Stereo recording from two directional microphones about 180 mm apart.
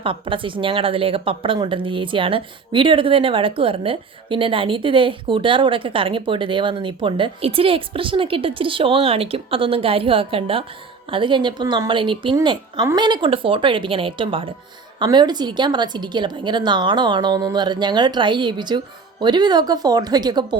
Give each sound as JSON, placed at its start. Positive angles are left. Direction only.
{"t": 0.0, "sound": "a woman's voice", "side_deg": -30}